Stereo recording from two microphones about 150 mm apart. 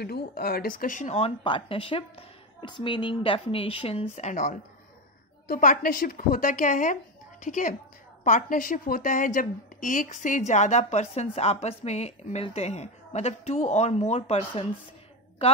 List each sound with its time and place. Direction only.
0.0 s speech: 90° left; by 1.3 s 45° left (ahead or behind)
1.4 s a woman's voice: 35° left (ahead or behind); by 4.6 s 55° left (ahead or behind)
5.5 s a woman's voice: 70° left (ahead or behind); by 15.6 s 40° left (ahead or behind)